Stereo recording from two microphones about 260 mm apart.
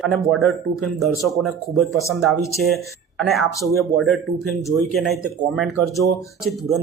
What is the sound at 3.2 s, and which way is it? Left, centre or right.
Speech, centre.